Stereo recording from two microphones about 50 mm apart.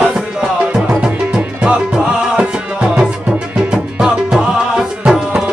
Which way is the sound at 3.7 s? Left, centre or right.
Centre.